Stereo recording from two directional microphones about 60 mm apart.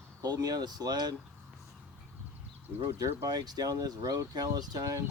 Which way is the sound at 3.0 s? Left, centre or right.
Right.